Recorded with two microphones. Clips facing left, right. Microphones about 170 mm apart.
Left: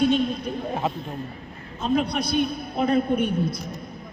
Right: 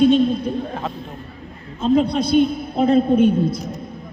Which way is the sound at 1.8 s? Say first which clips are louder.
Right 6 dB; 25° right (ahead or behind).